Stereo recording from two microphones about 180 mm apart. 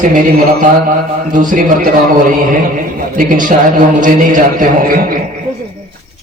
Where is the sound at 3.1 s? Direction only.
45° right (ahead or behind).